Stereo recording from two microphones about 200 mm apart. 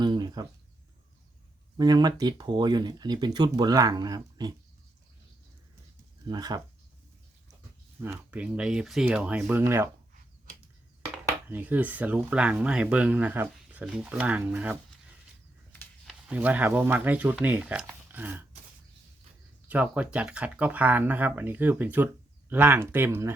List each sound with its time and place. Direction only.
0.0 s a sound: 20° right (ahead or behind)
1.7 s speech: 20° right (ahead or behind)
6.2 s speech: 20° right (ahead or behind)
8.0 s speech: 10° right (ahead or behind)
11.4 s speech: 10° right (ahead or behind)
15.7 s a sound: 5° left (ahead or behind)
16.3 s speech: 10° right (ahead or behind)
19.6 s speech: 10° right (ahead or behind)